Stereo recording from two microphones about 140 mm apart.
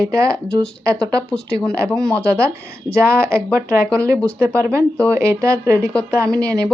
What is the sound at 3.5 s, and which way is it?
Speech, 20° right (ahead or behind).